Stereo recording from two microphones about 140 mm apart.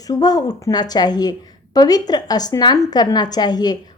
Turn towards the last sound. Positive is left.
turn(degrees=30)  # may be behind; listen again after turning